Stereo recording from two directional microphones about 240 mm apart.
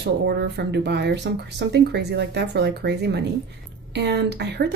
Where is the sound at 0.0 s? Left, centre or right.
Right.